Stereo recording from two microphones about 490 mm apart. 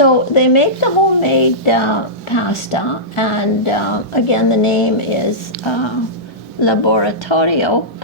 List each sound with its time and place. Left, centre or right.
0.0 s a woman's voice: left
5.6 s speech: left